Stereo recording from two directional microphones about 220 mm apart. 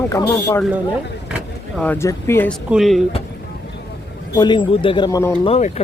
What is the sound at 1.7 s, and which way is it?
Speech, 10° left (ahead or behind).